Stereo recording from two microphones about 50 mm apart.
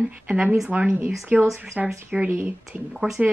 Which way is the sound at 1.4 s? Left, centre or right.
Centre.